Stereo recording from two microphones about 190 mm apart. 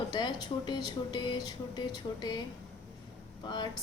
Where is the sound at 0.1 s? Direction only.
20° left (ahead or behind).